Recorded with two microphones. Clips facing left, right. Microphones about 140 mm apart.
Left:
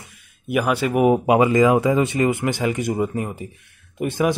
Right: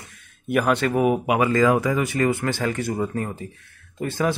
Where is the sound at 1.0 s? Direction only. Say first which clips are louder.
Left 7 dB; 25° left (ahead or behind).